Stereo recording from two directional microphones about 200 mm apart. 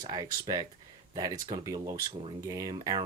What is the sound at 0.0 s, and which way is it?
Speech, 20° right (ahead or behind).